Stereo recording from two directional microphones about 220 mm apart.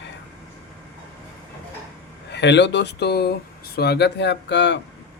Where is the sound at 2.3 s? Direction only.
50° left (ahead or behind).